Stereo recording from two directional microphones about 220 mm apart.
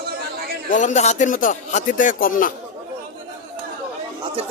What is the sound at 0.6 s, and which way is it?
Speech, 35° left (ahead or behind).